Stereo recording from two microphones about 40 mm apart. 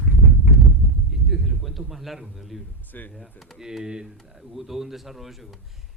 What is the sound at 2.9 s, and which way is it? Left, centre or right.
Speech, left.